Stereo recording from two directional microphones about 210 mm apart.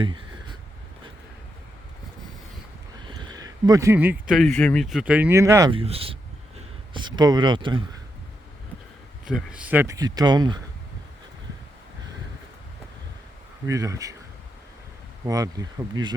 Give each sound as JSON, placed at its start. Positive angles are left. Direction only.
{"t": 3.1, "sound": "speech", "side_deg": -20}
{"t": 9.2, "sound": "speech", "side_deg": -5}
{"t": 13.7, "sound": "speech", "side_deg": -15}
{"t": 15.3, "sound": "speech", "side_deg": -15}